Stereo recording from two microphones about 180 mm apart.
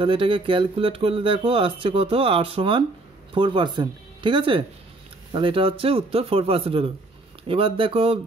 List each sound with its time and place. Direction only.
0.0 s speech: 30° right (ahead or behind)